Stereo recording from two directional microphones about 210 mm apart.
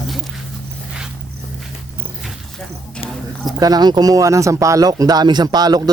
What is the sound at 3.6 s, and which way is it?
Speech, 20° right (ahead or behind).